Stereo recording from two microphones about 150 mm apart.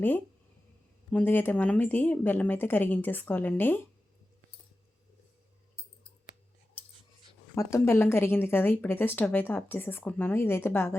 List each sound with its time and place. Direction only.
1.1 s a woman's voice: 15° left (ahead or behind)
7.5 s a woman's voice: 20° left (ahead or behind)